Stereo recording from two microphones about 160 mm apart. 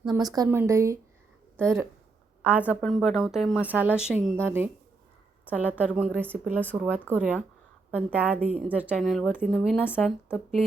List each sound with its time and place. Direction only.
0.1 s a woman's voice: 25° right (ahead or behind)
9.0 s a woman's voice: centre (ahead or behind)